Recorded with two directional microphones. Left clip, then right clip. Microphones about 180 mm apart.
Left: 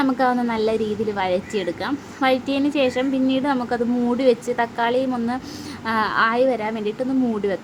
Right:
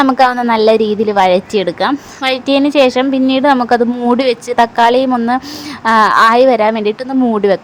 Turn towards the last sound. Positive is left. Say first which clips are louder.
# right 10 dB
turn(degrees=-35)  # may be behind; listen again after turning